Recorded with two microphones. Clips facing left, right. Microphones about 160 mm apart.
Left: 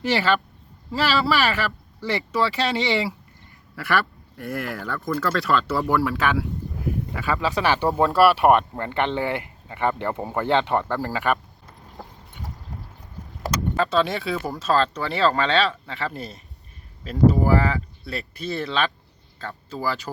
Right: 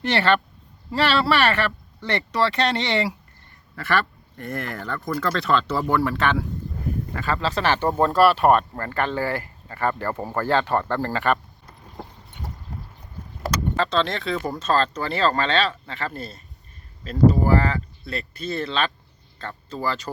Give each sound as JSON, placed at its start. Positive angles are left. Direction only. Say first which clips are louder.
{"t": 0.0, "sound": "speech", "louder": "right 1 dB", "side_deg": 5}
{"t": 13.7, "sound": "speech", "louder": "left 2 dB", "side_deg": 5}